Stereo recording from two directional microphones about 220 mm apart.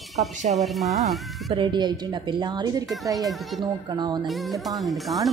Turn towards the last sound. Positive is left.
turn(degrees=0)  # may be behind; listen again after turning